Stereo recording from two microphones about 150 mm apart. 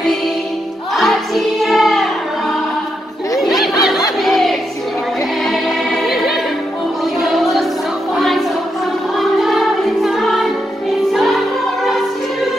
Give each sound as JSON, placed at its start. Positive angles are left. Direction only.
{"t": 0.9, "sound": "music", "side_deg": 0}
{"t": 3.3, "sound": "a sound", "side_deg": 0}
{"t": 7.2, "sound": "music", "side_deg": 0}
{"t": 9.2, "sound": "music", "side_deg": 0}